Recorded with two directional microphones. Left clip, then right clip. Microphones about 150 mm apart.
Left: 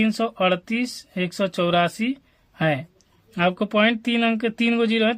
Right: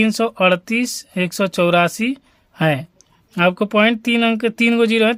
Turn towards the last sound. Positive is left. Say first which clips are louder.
# right 6 dB
turn(degrees=-40)  # may be behind; listen again after turning